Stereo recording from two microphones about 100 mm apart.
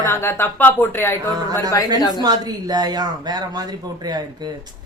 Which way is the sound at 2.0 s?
40° left (ahead or behind).